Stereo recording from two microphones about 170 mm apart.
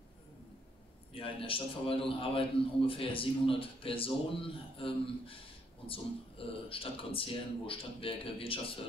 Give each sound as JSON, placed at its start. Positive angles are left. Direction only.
{"t": 1.1, "sound": "a man's voice", "side_deg": 30}